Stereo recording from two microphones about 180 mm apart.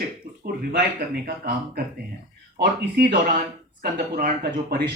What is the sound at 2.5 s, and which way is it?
Speech, 65° right (ahead or behind).